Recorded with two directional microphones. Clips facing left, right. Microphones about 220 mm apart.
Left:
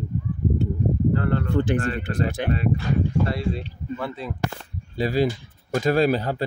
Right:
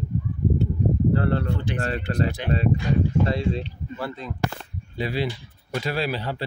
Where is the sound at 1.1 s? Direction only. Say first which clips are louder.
Even; 35° right (ahead or behind).